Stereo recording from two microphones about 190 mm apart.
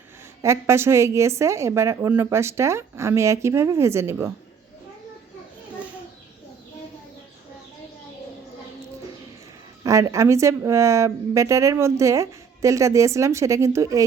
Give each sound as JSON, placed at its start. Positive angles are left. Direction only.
{"t": 0.4, "sound": "speech", "side_deg": -15}
{"t": 9.8, "sound": "speech", "side_deg": -15}